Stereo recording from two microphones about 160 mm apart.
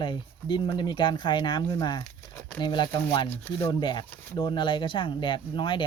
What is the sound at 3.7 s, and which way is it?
Speech, 30° left (ahead or behind).